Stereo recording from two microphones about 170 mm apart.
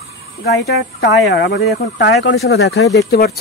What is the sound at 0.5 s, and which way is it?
Speech, 85° left.